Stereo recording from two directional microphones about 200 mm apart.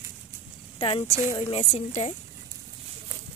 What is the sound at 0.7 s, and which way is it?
Speech, 25° left (ahead or behind).